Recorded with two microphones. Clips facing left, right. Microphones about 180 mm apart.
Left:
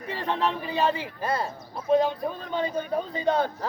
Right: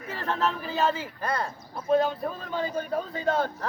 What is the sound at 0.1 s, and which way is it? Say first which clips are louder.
A man's voice: left 1 dB; centre (ahead or behind).